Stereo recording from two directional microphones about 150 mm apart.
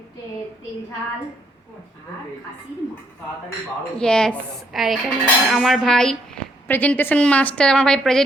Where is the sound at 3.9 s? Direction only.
5° left (ahead or behind).